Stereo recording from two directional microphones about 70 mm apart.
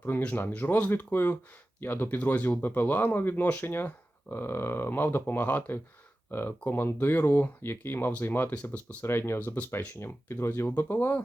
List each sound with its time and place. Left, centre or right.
0.3 s speech: left
9.0 s speech: left